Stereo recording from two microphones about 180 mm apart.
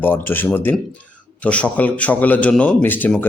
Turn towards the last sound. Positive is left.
turn(degrees=10)  # may be behind; listen again after turning